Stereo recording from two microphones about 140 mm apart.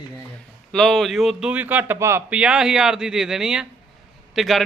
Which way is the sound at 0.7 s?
Centre (ahead or behind).